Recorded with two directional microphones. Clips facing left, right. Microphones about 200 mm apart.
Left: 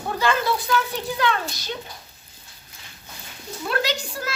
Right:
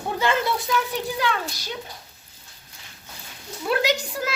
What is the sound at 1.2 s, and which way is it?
Speech, 10° right (ahead or behind).